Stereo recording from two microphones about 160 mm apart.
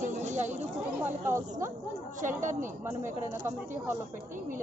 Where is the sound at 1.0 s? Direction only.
15° right (ahead or behind).